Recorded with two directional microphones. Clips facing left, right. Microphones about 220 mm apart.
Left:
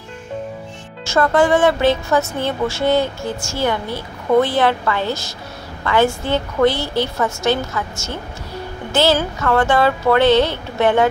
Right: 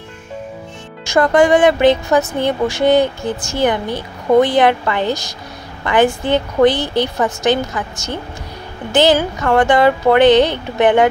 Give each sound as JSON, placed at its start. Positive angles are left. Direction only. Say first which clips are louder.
{"t": 1.0, "sound": "speech", "louder": "right 3 dB", "side_deg": -15}